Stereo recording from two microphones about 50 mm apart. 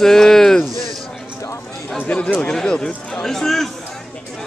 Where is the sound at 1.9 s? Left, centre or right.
Left; by 3.7 s centre.